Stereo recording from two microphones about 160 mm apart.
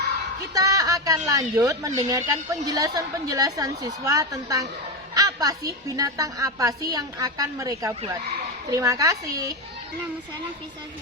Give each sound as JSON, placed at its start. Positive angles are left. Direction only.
{"t": 0.5, "sound": "a woman's voice", "side_deg": -20}